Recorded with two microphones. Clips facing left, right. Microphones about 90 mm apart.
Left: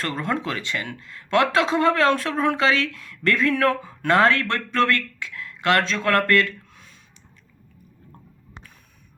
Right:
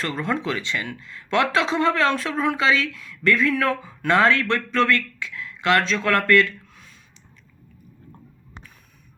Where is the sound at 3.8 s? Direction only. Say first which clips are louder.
Left 1 dB; 35° left (ahead or behind).